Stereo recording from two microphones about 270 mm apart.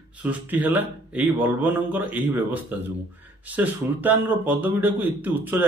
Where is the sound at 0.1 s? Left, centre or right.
Centre.